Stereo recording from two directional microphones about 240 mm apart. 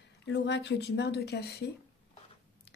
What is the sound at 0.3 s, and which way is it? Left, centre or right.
Speech, left.